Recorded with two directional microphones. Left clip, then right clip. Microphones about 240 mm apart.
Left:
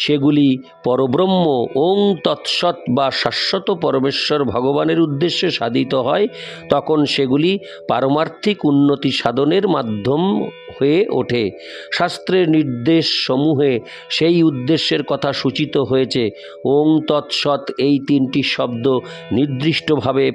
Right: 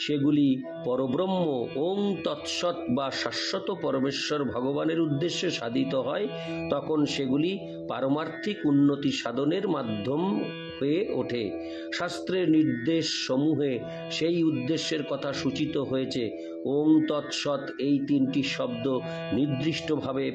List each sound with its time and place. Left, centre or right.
0.0 s speech: left